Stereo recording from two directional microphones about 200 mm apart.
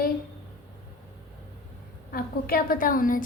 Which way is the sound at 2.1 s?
50° left (ahead or behind).